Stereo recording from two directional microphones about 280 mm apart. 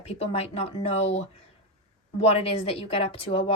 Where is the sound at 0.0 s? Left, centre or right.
Left.